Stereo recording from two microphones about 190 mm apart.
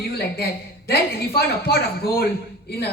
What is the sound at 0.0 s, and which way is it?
A woman's voice, 55° left (ahead or behind).